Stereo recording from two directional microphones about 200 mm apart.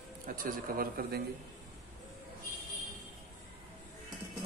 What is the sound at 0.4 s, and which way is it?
Speech, 45° right (ahead or behind).